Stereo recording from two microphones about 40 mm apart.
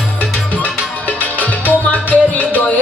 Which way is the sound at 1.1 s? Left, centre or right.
Left.